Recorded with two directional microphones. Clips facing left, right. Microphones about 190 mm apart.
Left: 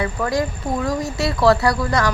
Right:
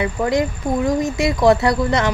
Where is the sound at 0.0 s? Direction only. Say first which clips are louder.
Right 3 dB; 20° right (ahead or behind).